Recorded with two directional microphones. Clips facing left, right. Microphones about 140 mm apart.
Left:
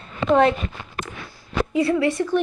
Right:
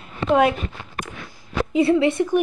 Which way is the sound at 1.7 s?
25° right (ahead or behind).